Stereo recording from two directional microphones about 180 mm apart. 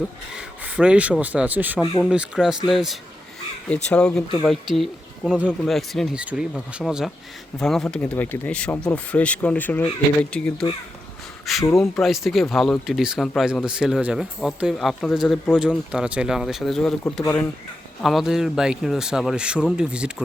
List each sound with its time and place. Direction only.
0.3 s speech: 5° right (ahead or behind)
1.8 s speech: 25° left (ahead or behind)
2.0 s speech: 5° right (ahead or behind)
11.6 s speech: 15° left (ahead or behind)
11.9 s speech: centre (ahead or behind)